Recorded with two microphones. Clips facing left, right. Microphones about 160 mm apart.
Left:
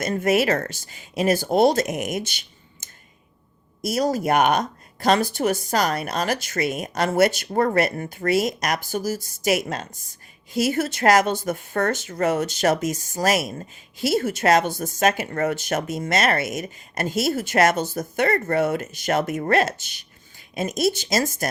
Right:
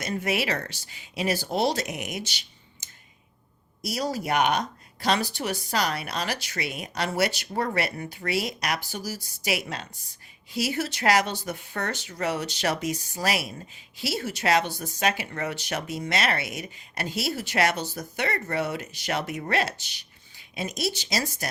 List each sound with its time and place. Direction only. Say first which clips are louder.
0.0 s speech: left 7 dB; 50° left (ahead or behind)